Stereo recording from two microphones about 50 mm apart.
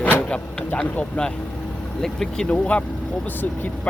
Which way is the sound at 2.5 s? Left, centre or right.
Left.